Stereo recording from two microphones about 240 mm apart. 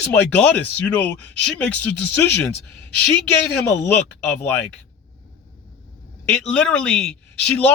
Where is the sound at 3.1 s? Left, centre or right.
Centre.